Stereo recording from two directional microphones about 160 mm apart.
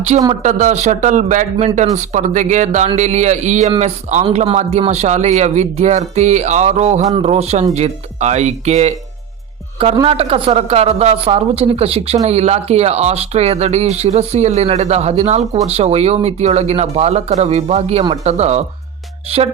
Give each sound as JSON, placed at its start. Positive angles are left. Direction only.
{"t": 0.1, "sound": "speech", "side_deg": -45}
{"t": 9.7, "sound": "speech", "side_deg": -35}